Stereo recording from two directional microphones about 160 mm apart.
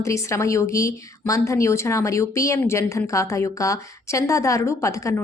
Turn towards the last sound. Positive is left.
turn(degrees=20)  # may be behind; listen again after turning